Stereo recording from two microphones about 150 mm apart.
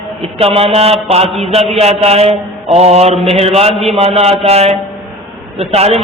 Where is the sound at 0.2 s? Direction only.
40° right (ahead or behind).